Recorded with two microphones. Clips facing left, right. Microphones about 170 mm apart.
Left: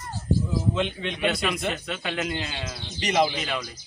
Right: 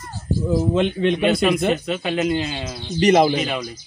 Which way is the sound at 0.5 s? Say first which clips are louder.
Right 7 dB; 50° right (ahead or behind).